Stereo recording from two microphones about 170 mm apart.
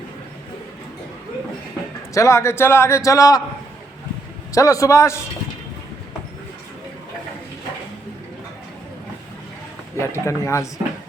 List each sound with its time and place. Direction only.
2.1 s a man's voice: 15° left (ahead or behind)
4.5 s a man's voice: 20° left (ahead or behind)
10.1 s a man's voice: 15° left (ahead or behind)